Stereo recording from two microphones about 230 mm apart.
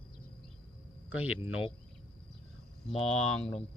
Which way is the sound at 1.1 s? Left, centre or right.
Centre.